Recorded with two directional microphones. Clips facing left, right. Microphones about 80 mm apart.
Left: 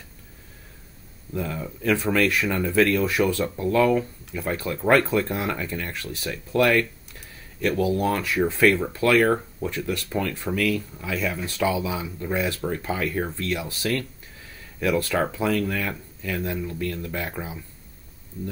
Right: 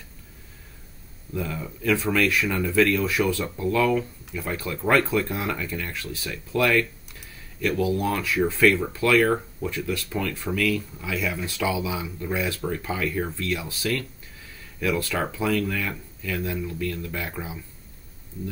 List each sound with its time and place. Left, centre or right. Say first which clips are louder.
1.3 s speech: left 1 dB; left
8.9 s speech: left 1 dB; left
9.8 s speech: left 3 dB; centre